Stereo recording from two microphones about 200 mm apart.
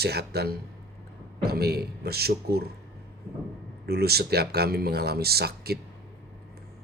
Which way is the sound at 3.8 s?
50° right (ahead or behind).